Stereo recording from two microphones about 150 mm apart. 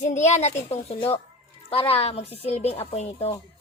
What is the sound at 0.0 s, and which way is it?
A woman's voice, 50° left (ahead or behind).